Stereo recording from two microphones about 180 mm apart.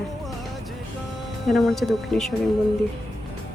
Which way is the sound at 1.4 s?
Centre (ahead or behind).